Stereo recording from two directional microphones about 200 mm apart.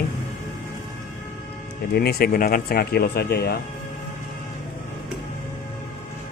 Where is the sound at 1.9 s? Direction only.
50° left (ahead or behind).